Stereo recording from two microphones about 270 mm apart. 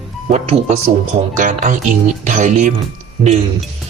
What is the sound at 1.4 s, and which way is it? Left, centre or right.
Speech, right.